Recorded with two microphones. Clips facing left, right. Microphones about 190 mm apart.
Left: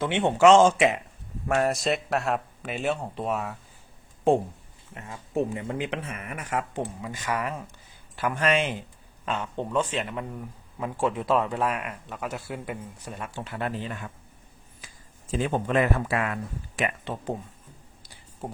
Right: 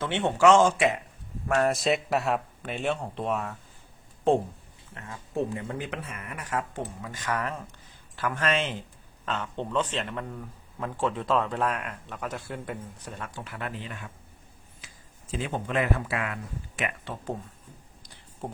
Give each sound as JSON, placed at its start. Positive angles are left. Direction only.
{"t": 0.0, "sound": "speech", "side_deg": 15}
{"t": 1.6, "sound": "speech", "side_deg": 0}
{"t": 4.9, "sound": "speech", "side_deg": 20}
{"t": 13.3, "sound": "speech", "side_deg": 30}
{"t": 15.3, "sound": "speech", "side_deg": 45}
{"t": 17.1, "sound": "speech", "side_deg": 20}